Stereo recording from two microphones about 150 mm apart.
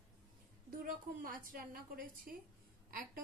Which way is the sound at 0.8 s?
70° right (ahead or behind).